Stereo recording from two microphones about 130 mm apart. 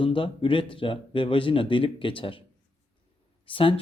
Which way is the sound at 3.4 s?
40° left (ahead or behind).